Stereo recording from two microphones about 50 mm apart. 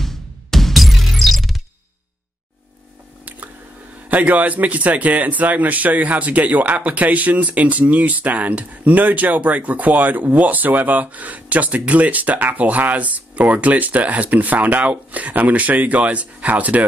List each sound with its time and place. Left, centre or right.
0.0 s music: centre
4.1 s a man's voice: right